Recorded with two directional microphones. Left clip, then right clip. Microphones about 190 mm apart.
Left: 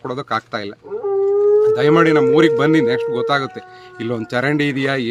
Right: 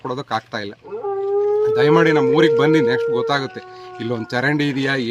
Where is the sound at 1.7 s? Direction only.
5° left (ahead or behind).